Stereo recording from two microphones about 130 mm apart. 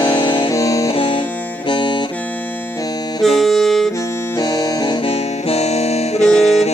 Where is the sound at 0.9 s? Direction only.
45° left (ahead or behind).